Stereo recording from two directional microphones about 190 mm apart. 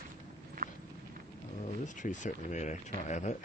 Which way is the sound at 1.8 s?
40° left (ahead or behind).